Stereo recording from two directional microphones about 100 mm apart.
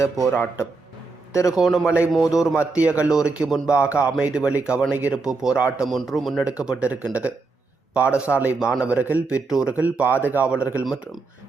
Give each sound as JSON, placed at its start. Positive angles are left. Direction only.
{"t": 0.3, "sound": "a man's voice", "side_deg": 30}
{"t": 1.5, "sound": "a man's voice", "side_deg": -5}
{"t": 2.7, "sound": "a man's voice", "side_deg": -15}
{"t": 6.6, "sound": "a man's voice", "side_deg": -10}